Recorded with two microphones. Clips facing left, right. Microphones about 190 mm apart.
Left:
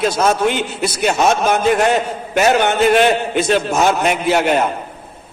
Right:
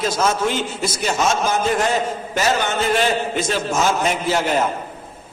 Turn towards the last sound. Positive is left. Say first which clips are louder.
# left 4 dB
turn(degrees=65)  # may be behind; listen again after turning